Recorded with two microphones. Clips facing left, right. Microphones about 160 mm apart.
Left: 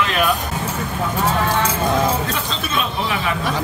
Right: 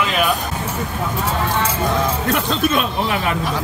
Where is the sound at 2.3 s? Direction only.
55° right (ahead or behind).